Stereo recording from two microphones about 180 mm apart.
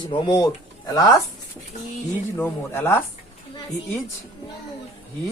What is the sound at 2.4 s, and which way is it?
Speech, 10° left (ahead or behind).